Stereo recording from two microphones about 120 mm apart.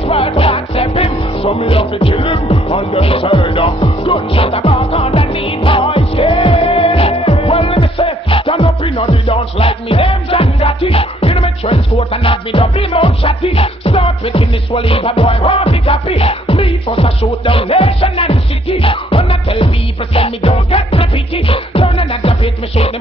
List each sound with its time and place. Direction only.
0.1 s music: 50° left (ahead or behind)